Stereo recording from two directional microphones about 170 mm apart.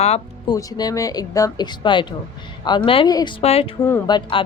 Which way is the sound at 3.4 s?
35° left (ahead or behind).